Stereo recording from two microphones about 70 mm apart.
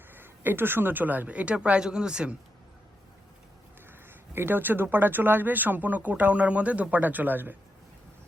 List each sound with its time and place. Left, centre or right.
0.1 s speech: right; by 2.3 s centre
4.4 s speech: right